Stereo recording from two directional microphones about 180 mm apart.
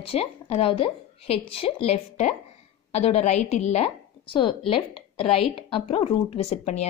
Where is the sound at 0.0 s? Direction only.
35° left (ahead or behind).